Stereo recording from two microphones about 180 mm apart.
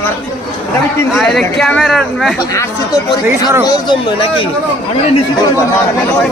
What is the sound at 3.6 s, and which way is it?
Speech, 25° left (ahead or behind).